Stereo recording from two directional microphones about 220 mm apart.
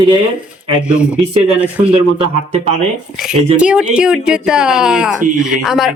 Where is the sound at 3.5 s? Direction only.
5° right (ahead or behind).